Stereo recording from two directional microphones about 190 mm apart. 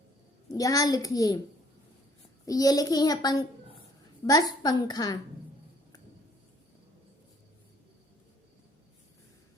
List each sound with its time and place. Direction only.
0.5 s a woman's voice: 20° left (ahead or behind)
2.5 s a woman's voice: 20° left (ahead or behind)